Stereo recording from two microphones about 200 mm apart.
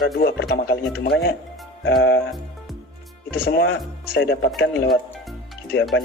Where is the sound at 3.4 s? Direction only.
55° left (ahead or behind).